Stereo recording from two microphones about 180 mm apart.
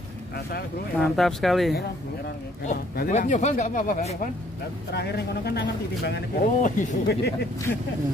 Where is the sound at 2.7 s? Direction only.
45° left (ahead or behind).